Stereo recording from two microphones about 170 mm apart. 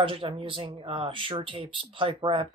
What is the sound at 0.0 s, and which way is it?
Speech, 30° right (ahead or behind).